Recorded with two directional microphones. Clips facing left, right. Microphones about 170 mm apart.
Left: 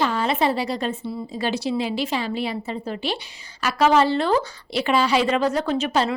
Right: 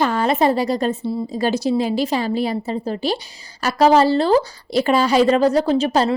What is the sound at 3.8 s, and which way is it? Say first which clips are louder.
A woman's voice: right 4 dB; 35° right (ahead or behind).